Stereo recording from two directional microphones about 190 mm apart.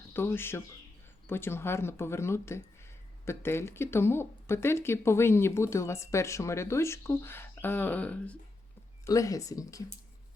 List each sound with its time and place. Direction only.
0.1 s speech: 10° left (ahead or behind)
9.0 s speech: 15° left (ahead or behind)